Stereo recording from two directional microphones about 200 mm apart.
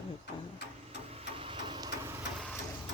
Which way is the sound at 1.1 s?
30° right (ahead or behind).